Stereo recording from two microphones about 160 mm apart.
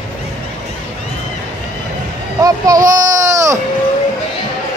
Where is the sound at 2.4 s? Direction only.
20° right (ahead or behind).